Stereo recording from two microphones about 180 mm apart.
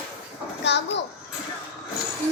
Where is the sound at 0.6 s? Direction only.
75° left (ahead or behind).